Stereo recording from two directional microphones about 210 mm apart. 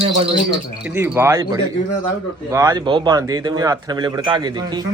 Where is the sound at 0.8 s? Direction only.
10° right (ahead or behind).